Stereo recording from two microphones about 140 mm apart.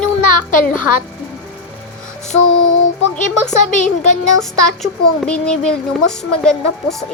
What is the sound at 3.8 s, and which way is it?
Speech, 60° left (ahead or behind).